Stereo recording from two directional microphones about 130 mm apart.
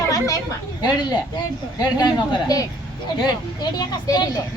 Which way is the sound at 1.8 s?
30° left (ahead or behind).